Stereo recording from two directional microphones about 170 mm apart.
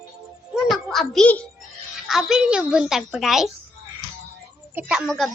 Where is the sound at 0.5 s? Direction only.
Centre (ahead or behind).